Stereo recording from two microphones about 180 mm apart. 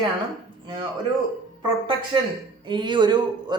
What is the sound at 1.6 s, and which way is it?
A man's voice, 25° right (ahead or behind).